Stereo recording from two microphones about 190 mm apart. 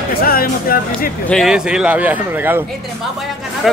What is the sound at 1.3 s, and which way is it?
Speech, centre (ahead or behind).